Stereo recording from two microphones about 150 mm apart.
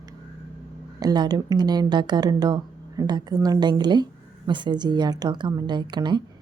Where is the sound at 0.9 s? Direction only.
25° right (ahead or behind).